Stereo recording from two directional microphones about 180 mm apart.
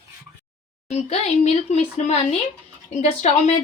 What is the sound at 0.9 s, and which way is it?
Speech, 35° left (ahead or behind).